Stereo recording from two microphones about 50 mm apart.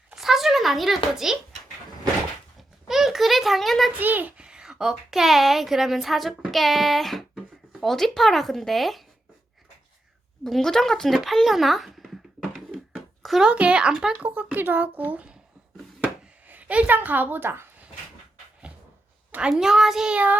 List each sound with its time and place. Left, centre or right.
0.1 s a sound: centre
2.8 s a sound: centre
3.9 s a woman's voice: right
4.4 s a child's voice: centre
10.4 s a child's voice: centre
13.5 s a child's voice: right
14.2 s a woman's voice: right
16.5 s a woman's voice: right
19.5 s a child's voice: centre
20.1 s speech: right